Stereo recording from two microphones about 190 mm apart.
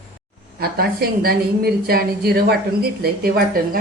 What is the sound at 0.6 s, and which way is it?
A woman's voice, 55° right (ahead or behind).